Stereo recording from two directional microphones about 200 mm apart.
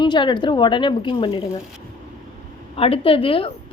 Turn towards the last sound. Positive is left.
turn(degrees=30)  # may be behind; listen again after turning